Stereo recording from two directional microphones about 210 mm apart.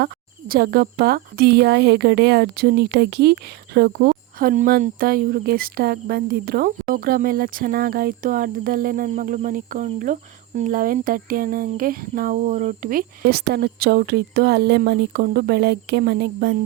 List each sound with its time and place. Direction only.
0.0 s speech: 45° right (ahead or behind)